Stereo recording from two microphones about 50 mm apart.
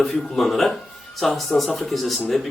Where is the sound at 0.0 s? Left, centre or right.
Centre.